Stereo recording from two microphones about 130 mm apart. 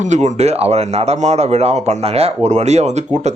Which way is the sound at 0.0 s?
65° right (ahead or behind).